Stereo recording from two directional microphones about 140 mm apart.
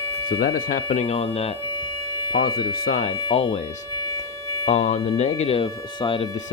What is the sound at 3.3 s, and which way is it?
Speech, 45° left (ahead or behind).